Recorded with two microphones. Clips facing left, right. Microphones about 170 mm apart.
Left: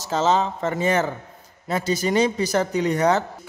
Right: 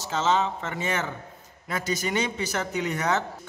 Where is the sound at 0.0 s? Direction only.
40° left (ahead or behind).